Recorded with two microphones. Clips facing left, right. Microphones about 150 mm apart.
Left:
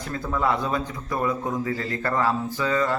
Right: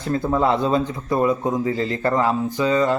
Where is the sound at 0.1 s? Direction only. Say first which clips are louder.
Right 6 dB; 30° right (ahead or behind).